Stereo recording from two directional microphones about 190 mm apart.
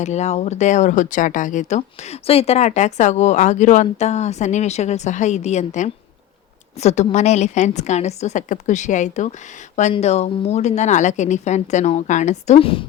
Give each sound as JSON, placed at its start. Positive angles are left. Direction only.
{"t": 0.0, "sound": "speech", "side_deg": 35}